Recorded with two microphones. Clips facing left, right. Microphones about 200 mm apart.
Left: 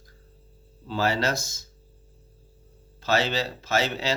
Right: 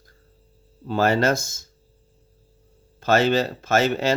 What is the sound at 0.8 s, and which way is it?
Speech, 50° right (ahead or behind).